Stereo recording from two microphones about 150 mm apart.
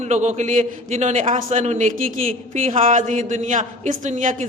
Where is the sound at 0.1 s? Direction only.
50° right (ahead or behind).